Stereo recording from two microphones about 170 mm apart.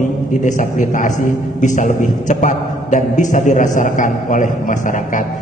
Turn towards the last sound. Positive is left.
turn(degrees=50)  # may be behind; listen again after turning